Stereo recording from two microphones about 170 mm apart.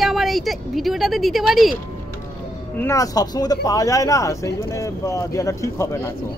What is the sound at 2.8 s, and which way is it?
Speech, 20° left (ahead or behind).